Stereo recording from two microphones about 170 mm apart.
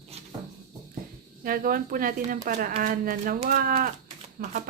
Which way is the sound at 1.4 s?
55° right (ahead or behind).